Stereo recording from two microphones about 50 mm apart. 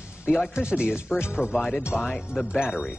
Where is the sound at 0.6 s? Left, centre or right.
Centre.